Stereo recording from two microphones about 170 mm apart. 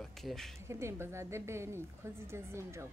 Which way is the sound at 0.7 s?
15° right (ahead or behind).